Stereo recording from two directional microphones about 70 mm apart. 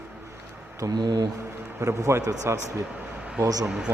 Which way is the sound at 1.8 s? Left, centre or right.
Right.